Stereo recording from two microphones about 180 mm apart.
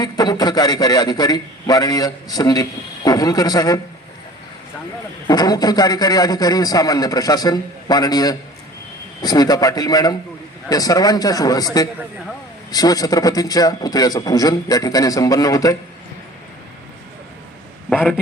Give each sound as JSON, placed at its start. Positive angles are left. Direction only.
{"t": 0.0, "sound": "a man's voice", "side_deg": 20}
{"t": 5.3, "sound": "a man's voice", "side_deg": 20}
{"t": 17.8, "sound": "a man's voice", "side_deg": 5}